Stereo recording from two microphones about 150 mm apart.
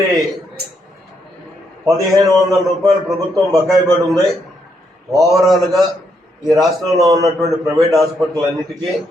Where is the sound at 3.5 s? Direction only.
Centre (ahead or behind).